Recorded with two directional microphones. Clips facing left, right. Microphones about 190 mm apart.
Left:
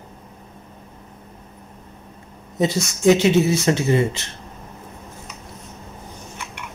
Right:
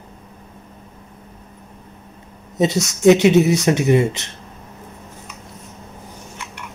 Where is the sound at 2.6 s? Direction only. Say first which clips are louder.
Right 3 dB; 20° right (ahead or behind).